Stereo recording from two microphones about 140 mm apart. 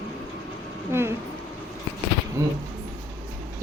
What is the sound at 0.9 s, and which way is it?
Speech, 20° right (ahead or behind).